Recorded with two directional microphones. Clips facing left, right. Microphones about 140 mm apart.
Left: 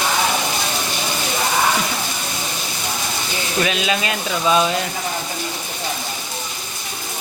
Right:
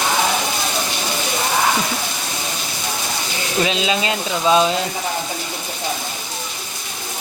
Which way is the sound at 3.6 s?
25° right (ahead or behind).